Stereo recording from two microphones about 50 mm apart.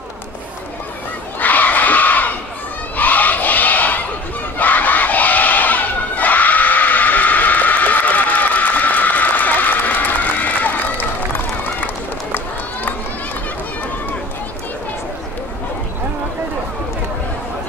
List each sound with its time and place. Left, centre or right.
1.4 s crowd: left
3.0 s a sound: left
4.6 s crowd: left